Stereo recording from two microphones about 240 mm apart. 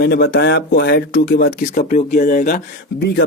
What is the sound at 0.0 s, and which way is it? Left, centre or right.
Speech, left.